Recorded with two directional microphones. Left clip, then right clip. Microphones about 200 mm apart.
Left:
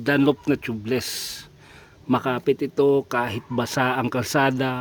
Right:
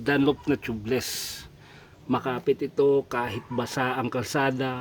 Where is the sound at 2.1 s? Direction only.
50° left (ahead or behind).